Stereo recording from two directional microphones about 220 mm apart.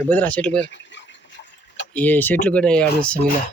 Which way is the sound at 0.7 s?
55° left (ahead or behind).